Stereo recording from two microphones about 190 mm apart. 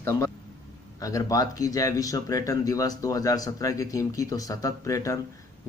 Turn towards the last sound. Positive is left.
turn(degrees=15)  # may be behind; listen again after turning